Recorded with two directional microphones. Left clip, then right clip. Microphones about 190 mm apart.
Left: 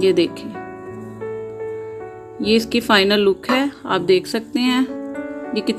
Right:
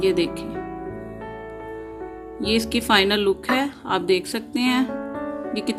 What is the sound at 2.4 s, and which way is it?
Speech, 30° left (ahead or behind).